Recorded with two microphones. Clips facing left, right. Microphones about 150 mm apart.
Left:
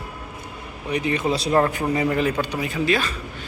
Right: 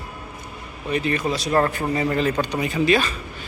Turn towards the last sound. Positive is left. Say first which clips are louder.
# right 3 dB
turn(degrees=0)  # may be behind; listen again after turning